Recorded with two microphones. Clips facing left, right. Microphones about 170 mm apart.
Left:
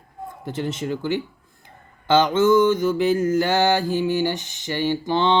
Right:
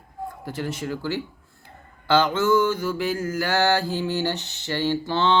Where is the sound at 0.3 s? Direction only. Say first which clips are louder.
Left 3 dB; 20° left (ahead or behind).